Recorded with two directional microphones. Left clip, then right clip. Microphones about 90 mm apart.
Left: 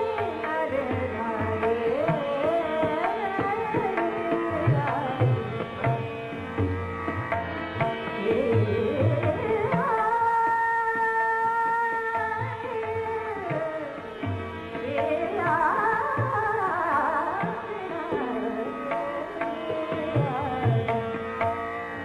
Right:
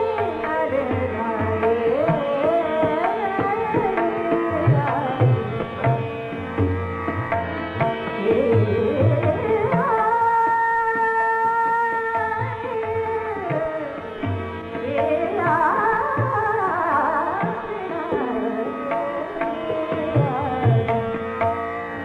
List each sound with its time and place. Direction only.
0.0 s music: 30° left (ahead or behind)
1.4 s carnatic music: 35° left (ahead or behind)
7.8 s music: 30° left (ahead or behind)
11.8 s music: 30° left (ahead or behind)
15.0 s music: 30° left (ahead or behind)
20.2 s music: 30° left (ahead or behind)